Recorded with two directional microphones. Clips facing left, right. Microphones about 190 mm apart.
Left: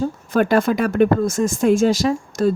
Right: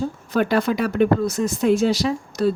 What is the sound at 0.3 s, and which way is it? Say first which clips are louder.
Speech: left 3 dB; 50° left (ahead or behind).